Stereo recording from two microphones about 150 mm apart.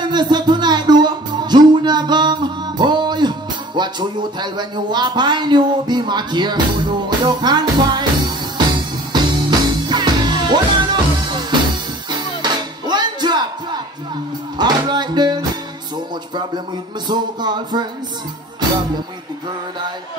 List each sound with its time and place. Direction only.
0.0 s music: 30° right (ahead or behind)
14.6 s music: 30° right (ahead or behind)
17.1 s speech: 30° right (ahead or behind)